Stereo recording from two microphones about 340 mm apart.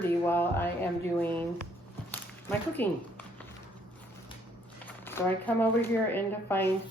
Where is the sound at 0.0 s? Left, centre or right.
Centre.